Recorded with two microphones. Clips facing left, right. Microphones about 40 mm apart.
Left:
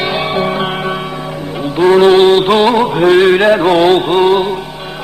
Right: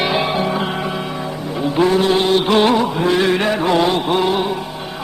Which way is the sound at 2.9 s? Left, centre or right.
Left.